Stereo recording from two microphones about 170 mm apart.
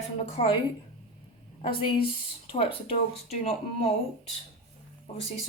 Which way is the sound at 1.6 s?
30° left (ahead or behind).